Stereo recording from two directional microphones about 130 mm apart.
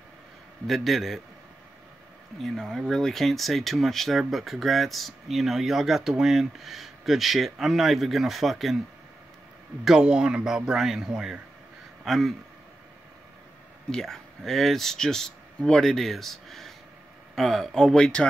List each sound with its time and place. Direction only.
0.7 s speech: centre (ahead or behind)
2.4 s speech: centre (ahead or behind)
9.8 s speech: 5° right (ahead or behind)
13.9 s speech: 5° left (ahead or behind)